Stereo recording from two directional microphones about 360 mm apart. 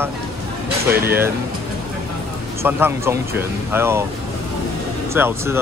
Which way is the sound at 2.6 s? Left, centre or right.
Centre.